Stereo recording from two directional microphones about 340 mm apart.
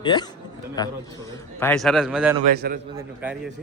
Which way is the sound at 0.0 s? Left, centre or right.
Centre.